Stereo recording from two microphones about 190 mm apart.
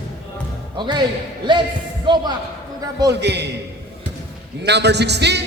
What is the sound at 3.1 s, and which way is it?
Speech, 60° right (ahead or behind).